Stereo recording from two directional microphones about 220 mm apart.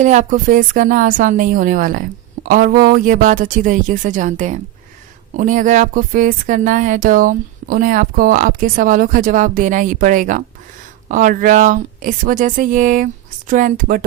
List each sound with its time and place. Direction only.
0.0 s speech: 35° right (ahead or behind)